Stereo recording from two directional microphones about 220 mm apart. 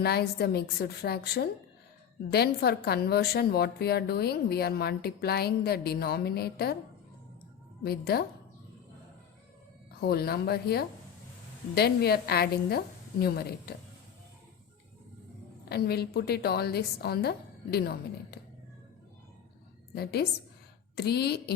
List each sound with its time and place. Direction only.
0.0 s a woman's voice: 45° left (ahead or behind)
7.9 s a woman's voice: 45° left (ahead or behind)
10.0 s a woman's voice: 45° left (ahead or behind)
15.7 s a woman's voice: 45° left (ahead or behind)
19.9 s a woman's voice: 45° left (ahead or behind)